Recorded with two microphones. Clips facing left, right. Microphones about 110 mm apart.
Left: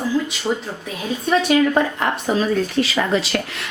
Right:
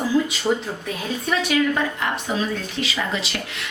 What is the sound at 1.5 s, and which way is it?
Speech, 45° left (ahead or behind).